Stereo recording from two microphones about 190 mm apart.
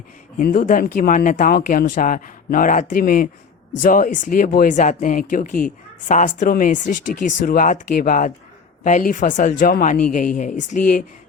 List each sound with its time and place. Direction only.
0.3 s speech: 45° left (ahead or behind)